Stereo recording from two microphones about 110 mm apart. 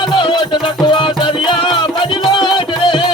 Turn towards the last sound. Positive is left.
turn(degrees=45)  # may be behind; listen again after turning